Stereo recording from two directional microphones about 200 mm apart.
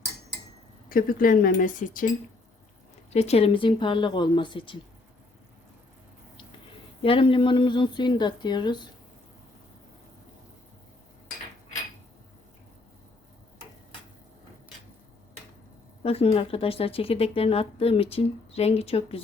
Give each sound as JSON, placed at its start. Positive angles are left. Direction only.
{"t": 0.9, "sound": "speech", "side_deg": 45}
{"t": 3.1, "sound": "a woman's voice", "side_deg": 30}
{"t": 7.0, "sound": "a woman's voice", "side_deg": 25}
{"t": 16.0, "sound": "a woman's voice", "side_deg": 30}